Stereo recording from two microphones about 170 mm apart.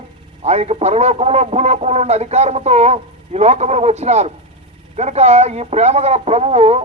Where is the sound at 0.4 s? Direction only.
40° right (ahead or behind).